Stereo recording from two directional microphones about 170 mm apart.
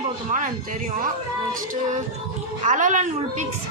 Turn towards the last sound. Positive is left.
turn(degrees=-45)  # may be behind; listen again after turning